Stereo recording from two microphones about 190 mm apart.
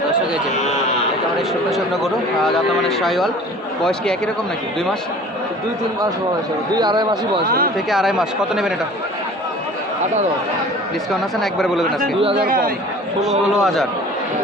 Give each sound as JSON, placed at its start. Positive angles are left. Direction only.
{"t": 1.4, "sound": "speech", "side_deg": 0}
{"t": 3.0, "sound": "speech", "side_deg": 0}
{"t": 6.7, "sound": "speech", "side_deg": -20}
{"t": 7.9, "sound": "speech", "side_deg": 0}
{"t": 11.1, "sound": "speech", "side_deg": 0}
{"t": 12.5, "sound": "a man's voice", "side_deg": -50}
{"t": 13.6, "sound": "speech", "side_deg": 0}